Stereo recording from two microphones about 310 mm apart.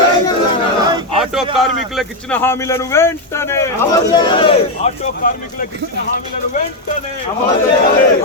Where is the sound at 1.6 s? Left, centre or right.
Centre.